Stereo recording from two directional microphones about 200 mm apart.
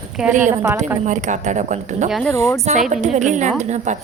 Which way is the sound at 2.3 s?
15° left (ahead or behind).